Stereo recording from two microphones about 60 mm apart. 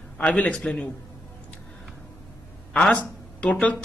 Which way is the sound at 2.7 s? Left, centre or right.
Left.